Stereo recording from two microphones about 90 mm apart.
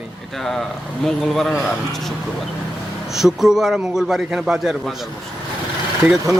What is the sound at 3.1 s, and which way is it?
Speech, 5° right (ahead or behind).